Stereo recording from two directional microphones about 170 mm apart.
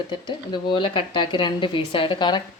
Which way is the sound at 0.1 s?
25° left (ahead or behind).